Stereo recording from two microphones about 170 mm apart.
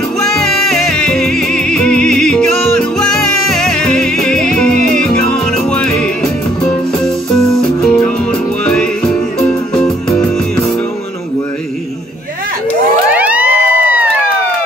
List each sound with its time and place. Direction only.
0.2 s music: centre (ahead or behind)
7.3 s music: 5° left (ahead or behind)
13.1 s music: 10° right (ahead or behind)